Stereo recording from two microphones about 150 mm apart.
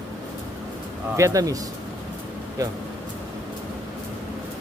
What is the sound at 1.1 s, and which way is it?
Speech, 20° right (ahead or behind).